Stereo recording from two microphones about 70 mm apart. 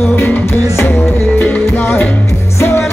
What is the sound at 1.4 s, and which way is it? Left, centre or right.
Music, left.